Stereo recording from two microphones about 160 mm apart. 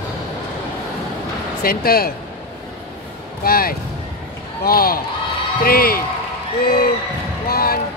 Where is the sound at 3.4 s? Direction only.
65° left (ahead or behind).